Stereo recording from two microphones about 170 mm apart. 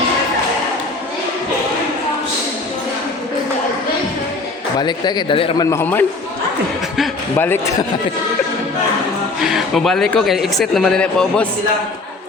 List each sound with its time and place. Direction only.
4.8 s a man's voice: 25° left (ahead or behind)
5.7 s a man's voice: 10° left (ahead or behind)
7.3 s a man's voice: 15° left (ahead or behind)
9.4 s speech: centre (ahead or behind)